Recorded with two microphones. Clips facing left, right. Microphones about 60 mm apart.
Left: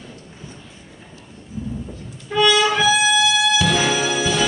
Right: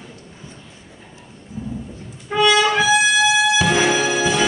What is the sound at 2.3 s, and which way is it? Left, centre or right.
Music, right.